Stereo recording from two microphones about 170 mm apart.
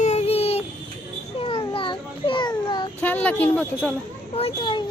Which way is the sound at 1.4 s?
30° left (ahead or behind).